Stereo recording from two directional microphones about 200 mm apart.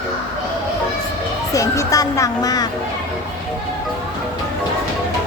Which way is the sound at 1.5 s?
15° left (ahead or behind).